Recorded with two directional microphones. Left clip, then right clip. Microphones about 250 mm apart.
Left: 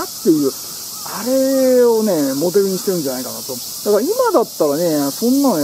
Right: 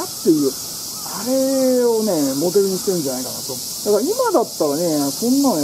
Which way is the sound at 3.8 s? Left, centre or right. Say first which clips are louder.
Left 3 dB; centre.